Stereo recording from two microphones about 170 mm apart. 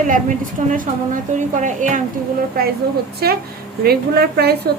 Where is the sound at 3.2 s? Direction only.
65° right (ahead or behind).